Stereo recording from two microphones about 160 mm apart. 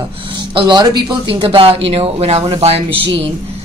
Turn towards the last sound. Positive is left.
turn(degrees=-35)  # may be behind; listen again after turning